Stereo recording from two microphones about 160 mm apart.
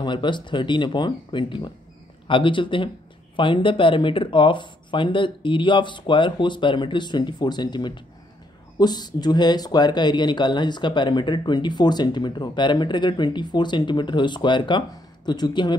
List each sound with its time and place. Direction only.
0.0 s speech: 30° left (ahead or behind)